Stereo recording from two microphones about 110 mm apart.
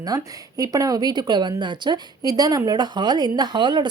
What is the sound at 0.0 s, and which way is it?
Speech, 35° right (ahead or behind).